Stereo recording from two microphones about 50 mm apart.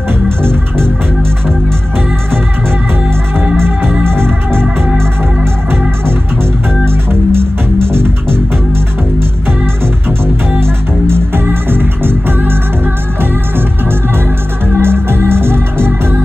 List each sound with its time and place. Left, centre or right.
0.4 s music: right
4.0 s music: right
7.1 s music: right
10.2 s music: right
14.8 s music: right